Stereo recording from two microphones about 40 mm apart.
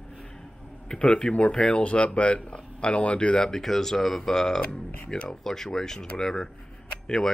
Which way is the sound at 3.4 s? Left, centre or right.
Centre.